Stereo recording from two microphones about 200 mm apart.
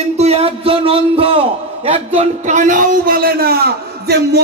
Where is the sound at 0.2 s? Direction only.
30° right (ahead or behind).